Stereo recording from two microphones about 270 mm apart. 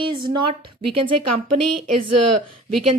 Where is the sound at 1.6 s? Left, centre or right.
Right.